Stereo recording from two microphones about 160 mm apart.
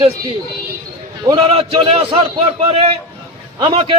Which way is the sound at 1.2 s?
30° right (ahead or behind).